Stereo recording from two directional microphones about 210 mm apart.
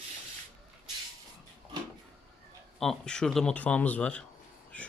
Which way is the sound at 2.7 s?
Centre (ahead or behind).